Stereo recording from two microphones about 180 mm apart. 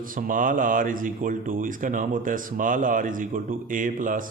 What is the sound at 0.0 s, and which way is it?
Speech, 50° right (ahead or behind).